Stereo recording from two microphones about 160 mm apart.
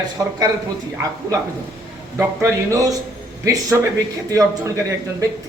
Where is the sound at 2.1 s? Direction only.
20° right (ahead or behind).